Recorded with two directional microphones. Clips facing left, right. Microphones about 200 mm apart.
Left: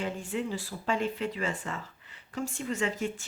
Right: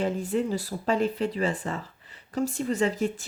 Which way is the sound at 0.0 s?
40° right (ahead or behind).